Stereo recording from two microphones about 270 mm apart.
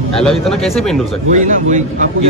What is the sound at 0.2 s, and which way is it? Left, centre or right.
Speech, centre.